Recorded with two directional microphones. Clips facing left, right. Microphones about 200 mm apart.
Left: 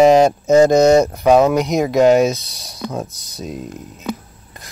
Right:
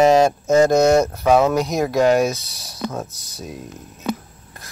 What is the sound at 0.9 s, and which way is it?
Speech, 15° left (ahead or behind).